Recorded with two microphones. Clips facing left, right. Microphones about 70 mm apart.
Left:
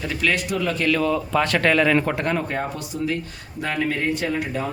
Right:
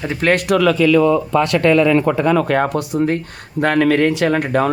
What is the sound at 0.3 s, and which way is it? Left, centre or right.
Speech, right.